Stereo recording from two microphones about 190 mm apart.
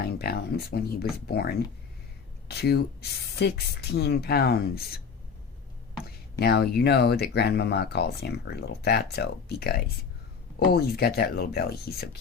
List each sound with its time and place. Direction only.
0.0 s speech: 55° left (ahead or behind)
6.4 s speech: 60° left (ahead or behind)